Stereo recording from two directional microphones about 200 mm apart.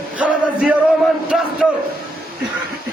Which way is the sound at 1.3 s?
Centre (ahead or behind).